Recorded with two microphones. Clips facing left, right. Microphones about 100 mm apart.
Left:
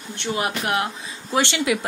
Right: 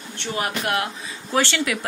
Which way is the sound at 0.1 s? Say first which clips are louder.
Left 2 dB; 20° left (ahead or behind).